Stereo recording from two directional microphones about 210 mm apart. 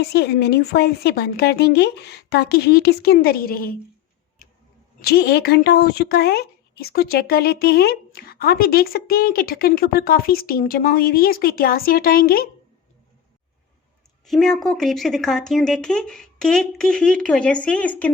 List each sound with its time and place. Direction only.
0.0 s speech: 50° left (ahead or behind)
4.9 s speech: 50° left (ahead or behind)
14.3 s speech: centre (ahead or behind)